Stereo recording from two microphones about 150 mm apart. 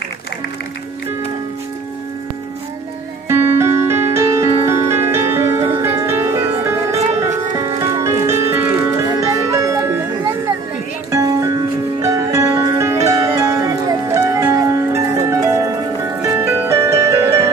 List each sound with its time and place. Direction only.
3.3 s music: 15° right (ahead or behind)
7.0 s music: 45° right (ahead or behind)
7.5 s music: 20° right (ahead or behind)
11.1 s music: 20° right (ahead or behind)